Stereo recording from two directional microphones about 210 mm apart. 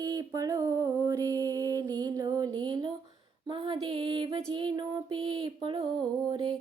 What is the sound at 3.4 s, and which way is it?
Female singing, 20° right (ahead or behind).